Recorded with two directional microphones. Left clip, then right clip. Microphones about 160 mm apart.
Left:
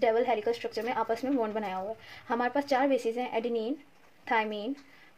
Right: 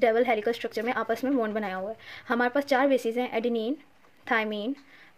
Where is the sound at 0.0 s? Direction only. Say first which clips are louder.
Right 3 dB; 35° right (ahead or behind).